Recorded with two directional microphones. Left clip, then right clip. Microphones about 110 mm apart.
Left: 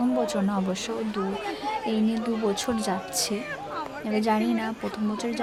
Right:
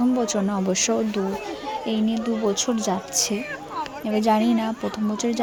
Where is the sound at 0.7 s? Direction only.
50° right (ahead or behind).